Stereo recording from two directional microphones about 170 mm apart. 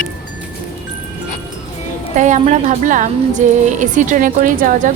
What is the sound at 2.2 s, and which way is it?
A woman's voice, 45° right (ahead or behind).